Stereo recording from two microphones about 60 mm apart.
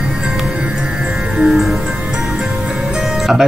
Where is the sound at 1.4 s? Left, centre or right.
Centre.